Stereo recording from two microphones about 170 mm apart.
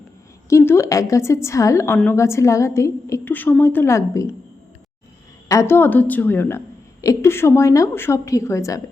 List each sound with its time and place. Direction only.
0.5 s a woman's voice: 15° left (ahead or behind)
5.5 s a woman's voice: 15° left (ahead or behind)